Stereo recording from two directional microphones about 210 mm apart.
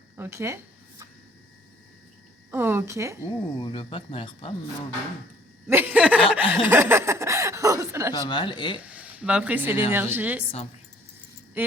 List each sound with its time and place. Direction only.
0.2 s a sound: 15° right (ahead or behind)
2.5 s speech: 10° right (ahead or behind)
3.6 s speech: 25° left (ahead or behind)
5.6 s chuckle: 10° right (ahead or behind)
6.5 s speech: 10° right (ahead or behind)
8.1 s speech: 20° left (ahead or behind)
8.8 s speech: 5° right (ahead or behind)
11.6 s speech: 10° right (ahead or behind)